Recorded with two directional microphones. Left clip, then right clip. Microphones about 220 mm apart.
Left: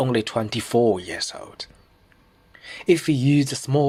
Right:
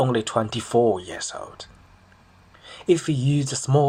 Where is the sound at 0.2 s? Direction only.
20° left (ahead or behind).